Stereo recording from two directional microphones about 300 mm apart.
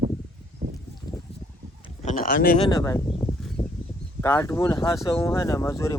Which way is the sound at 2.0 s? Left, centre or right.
Left.